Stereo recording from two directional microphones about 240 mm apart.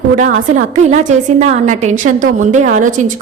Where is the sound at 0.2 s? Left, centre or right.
Right.